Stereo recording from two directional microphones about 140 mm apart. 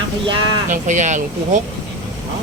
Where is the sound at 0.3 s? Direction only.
35° right (ahead or behind).